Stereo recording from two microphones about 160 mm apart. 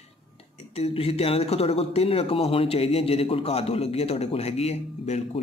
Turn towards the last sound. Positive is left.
turn(degrees=40)  # may be behind; listen again after turning